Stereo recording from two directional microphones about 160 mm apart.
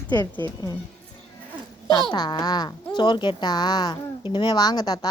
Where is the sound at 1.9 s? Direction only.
30° left (ahead or behind).